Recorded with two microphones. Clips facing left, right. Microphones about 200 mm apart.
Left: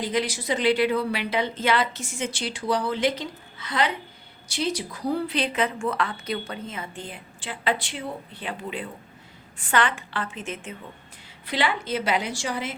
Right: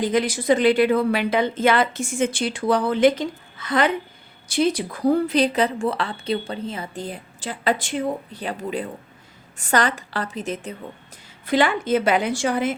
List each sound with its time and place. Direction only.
0.0 s speech: 50° right (ahead or behind)
11.4 s speech: 50° right (ahead or behind)